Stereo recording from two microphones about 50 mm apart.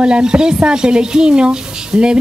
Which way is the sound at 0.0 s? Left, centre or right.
Centre.